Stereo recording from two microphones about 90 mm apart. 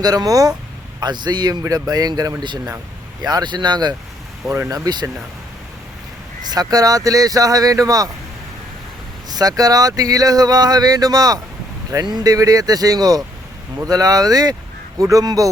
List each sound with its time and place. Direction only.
0.0 s speech: 45° right (ahead or behind)
6.4 s speech: 45° right (ahead or behind)
9.3 s speech: 45° right (ahead or behind)